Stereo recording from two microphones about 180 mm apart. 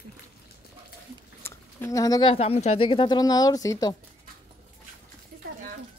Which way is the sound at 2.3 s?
35° left (ahead or behind).